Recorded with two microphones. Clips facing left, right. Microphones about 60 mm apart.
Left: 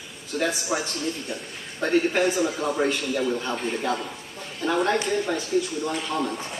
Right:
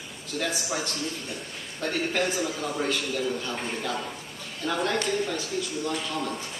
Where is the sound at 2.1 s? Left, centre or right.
Left.